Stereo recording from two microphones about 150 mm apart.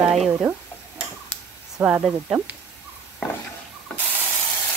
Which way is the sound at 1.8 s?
5° right (ahead or behind).